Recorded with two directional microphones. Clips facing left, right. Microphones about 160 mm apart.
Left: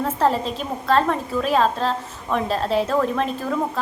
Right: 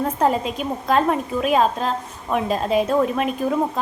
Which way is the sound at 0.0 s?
10° right (ahead or behind).